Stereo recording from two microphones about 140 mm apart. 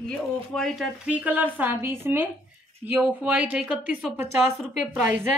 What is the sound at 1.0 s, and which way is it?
Speech, 10° right (ahead or behind).